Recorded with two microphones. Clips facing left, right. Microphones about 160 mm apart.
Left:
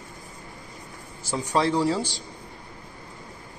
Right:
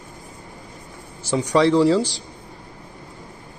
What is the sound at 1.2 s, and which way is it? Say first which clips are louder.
Speech: right 6 dB; 75° right (ahead or behind).